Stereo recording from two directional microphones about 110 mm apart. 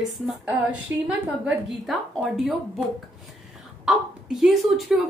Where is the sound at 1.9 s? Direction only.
Centre (ahead or behind).